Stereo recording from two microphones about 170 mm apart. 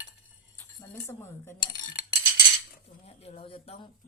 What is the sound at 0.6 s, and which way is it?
Speech, 15° left (ahead or behind).